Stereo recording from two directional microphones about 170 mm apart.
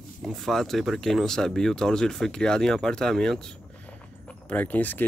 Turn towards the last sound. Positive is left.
turn(degrees=10)  # may be behind; listen again after turning